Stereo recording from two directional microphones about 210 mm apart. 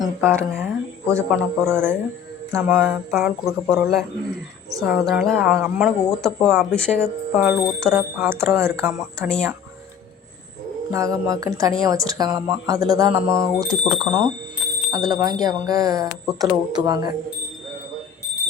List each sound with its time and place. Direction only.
0.0 s speech: 10° right (ahead or behind); by 7.1 s 5° left (ahead or behind)
7.3 s speech: 10° right (ahead or behind)
9.3 s speech: centre (ahead or behind)
10.9 s speech: 15° right (ahead or behind)